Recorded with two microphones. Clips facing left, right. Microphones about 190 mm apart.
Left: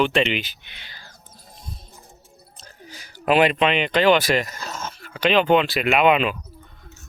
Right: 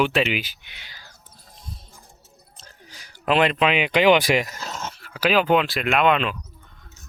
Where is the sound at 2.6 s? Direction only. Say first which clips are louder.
Left 5 dB; 5° left (ahead or behind).